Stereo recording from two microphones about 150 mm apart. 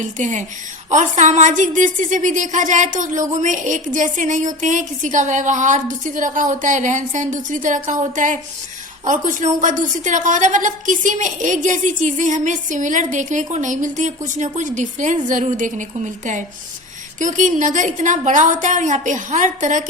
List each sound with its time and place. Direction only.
0.0 s a woman's voice: 55° right (ahead or behind)
17.2 s a woman's voice: 55° right (ahead or behind)